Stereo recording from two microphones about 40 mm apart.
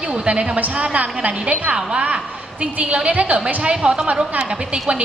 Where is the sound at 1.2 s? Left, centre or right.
Right.